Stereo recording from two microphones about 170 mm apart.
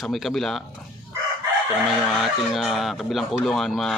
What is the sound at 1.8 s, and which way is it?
Speech, centre (ahead or behind).